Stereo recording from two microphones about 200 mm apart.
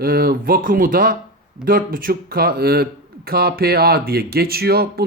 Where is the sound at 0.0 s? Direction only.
50° right (ahead or behind).